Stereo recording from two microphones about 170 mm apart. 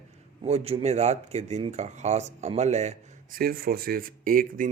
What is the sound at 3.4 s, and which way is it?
Speech, 65° right (ahead or behind).